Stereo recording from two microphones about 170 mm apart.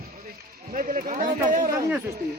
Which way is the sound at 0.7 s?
50° right (ahead or behind).